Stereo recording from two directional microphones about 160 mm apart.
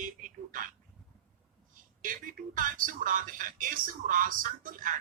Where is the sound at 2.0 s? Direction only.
55° right (ahead or behind).